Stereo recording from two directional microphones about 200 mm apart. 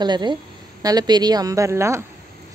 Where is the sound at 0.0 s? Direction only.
20° right (ahead or behind).